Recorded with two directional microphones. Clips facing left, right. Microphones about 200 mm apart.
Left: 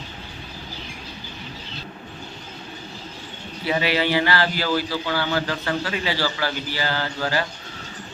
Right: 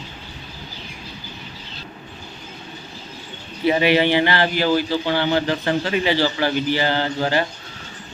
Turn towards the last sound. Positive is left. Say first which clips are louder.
# right 4 dB
turn(degrees=-20)  # may be behind; listen again after turning